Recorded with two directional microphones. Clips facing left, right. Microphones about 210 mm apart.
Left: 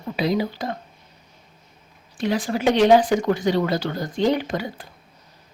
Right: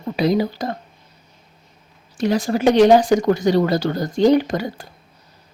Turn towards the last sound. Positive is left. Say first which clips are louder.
# right 7 dB
turn(degrees=-40)  # may be behind; listen again after turning